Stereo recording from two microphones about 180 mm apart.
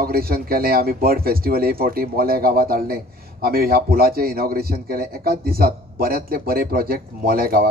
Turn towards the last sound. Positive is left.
turn(degrees=-55)  # may be behind; listen again after turning